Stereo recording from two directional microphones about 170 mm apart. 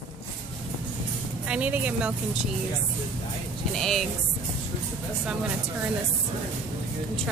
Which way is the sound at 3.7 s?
Centre (ahead or behind).